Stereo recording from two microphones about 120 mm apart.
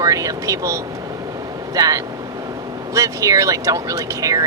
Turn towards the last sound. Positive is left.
turn(degrees=-30)  # may be behind; listen again after turning